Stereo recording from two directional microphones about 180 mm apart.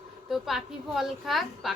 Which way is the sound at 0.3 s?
Centre (ahead or behind).